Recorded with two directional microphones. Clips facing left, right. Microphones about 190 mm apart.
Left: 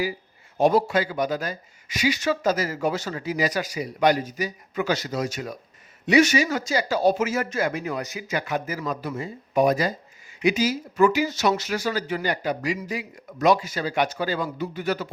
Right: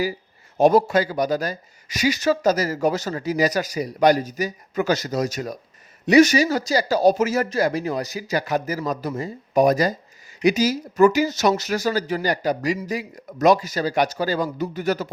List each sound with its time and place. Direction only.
0.6 s speech: 45° right (ahead or behind)